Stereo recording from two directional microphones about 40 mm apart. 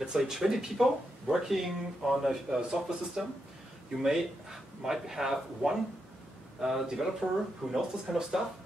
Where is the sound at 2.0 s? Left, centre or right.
Centre.